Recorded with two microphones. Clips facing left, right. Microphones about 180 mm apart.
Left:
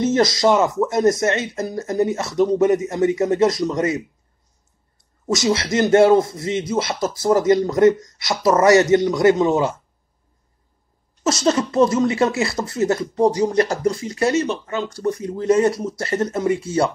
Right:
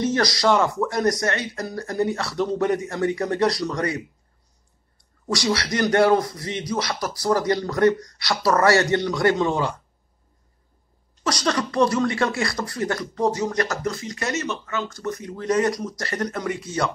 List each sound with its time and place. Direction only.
0.0 s speech: 25° left (ahead or behind)
11.2 s speech: 25° left (ahead or behind)